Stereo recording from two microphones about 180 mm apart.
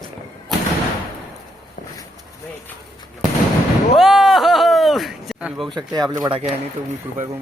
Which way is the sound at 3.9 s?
Centre (ahead or behind).